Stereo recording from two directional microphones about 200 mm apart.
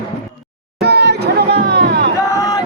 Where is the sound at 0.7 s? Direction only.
55° right (ahead or behind).